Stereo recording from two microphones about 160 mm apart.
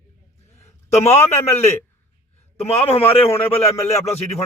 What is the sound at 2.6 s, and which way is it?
Speech, 40° left (ahead or behind).